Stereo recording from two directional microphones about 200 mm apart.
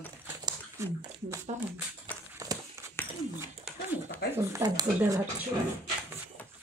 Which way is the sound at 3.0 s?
10° left (ahead or behind).